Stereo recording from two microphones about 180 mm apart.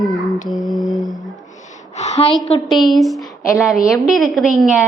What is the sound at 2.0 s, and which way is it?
Speech, 35° left (ahead or behind).